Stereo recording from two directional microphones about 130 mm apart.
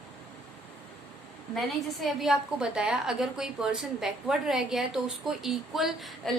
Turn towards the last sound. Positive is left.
turn(degrees=0)  # may be behind; listen again after turning